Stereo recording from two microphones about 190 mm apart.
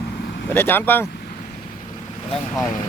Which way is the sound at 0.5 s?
10° left (ahead or behind).